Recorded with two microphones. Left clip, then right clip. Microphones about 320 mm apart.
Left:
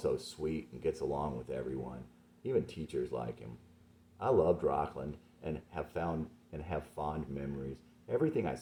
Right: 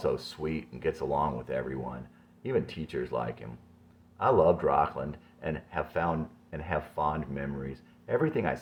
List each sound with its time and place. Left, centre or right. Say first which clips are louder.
0.3 s speech: right 3 dB; centre